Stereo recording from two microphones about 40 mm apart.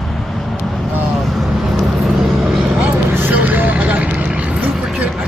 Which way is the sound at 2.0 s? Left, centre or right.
Centre.